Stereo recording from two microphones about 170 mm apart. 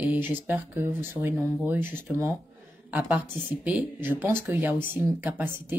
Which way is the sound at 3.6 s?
10° right (ahead or behind).